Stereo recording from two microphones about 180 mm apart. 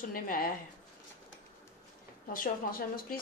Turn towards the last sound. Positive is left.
turn(degrees=50)  # may be behind; listen again after turning